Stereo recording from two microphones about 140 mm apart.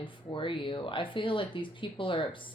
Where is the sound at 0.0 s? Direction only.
35° left (ahead or behind).